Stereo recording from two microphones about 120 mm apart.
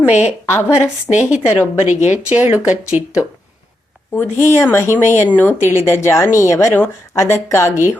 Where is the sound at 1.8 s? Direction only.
70° left (ahead or behind).